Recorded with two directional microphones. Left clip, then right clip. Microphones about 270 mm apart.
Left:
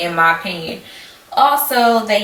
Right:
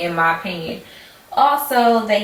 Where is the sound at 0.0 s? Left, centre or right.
Centre.